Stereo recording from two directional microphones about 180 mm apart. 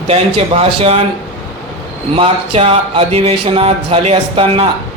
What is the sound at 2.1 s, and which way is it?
Speech, 30° right (ahead or behind).